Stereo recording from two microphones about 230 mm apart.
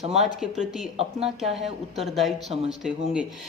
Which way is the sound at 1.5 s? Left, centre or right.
Centre.